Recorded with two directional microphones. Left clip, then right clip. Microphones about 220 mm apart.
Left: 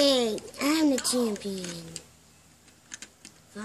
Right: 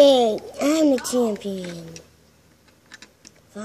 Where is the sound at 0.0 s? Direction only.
Centre (ahead or behind).